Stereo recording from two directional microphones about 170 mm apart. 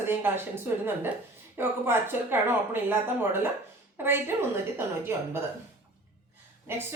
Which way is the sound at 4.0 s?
15° right (ahead or behind).